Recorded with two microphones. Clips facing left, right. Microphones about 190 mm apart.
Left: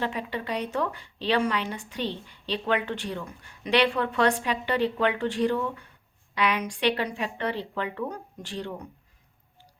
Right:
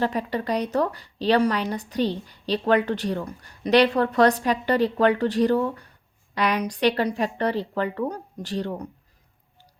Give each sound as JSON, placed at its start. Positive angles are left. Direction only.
{"t": 0.0, "sound": "speech", "side_deg": -40}